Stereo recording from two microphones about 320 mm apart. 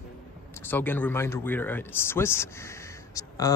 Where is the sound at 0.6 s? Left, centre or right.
Centre.